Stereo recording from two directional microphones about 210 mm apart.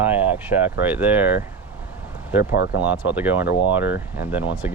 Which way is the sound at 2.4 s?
50° left (ahead or behind).